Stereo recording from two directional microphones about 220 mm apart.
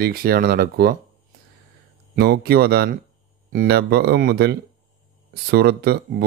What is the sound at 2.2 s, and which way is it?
Speech, 45° right (ahead or behind).